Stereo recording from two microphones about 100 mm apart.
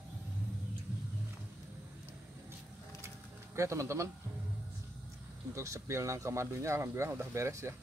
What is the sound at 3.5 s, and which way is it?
Speech, 30° right (ahead or behind).